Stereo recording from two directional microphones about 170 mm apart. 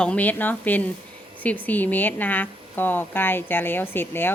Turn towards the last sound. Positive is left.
turn(degrees=10)  # may be behind; listen again after turning